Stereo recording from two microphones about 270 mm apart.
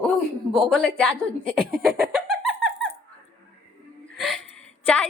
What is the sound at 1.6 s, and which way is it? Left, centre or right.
Laughter, centre.